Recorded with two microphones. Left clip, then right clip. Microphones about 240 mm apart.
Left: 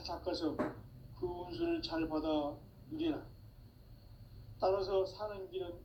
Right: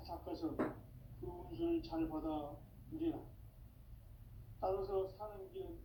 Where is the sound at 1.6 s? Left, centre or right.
Left.